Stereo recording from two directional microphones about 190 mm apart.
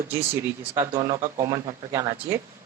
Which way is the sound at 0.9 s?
20° right (ahead or behind).